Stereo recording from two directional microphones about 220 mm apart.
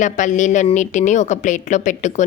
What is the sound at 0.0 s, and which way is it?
A woman's voice, 35° left (ahead or behind).